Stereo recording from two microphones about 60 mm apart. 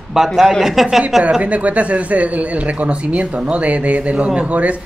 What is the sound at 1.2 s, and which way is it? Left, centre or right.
A man's voice, right.